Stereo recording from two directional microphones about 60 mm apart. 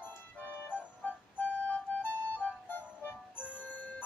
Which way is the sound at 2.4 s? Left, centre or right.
Left.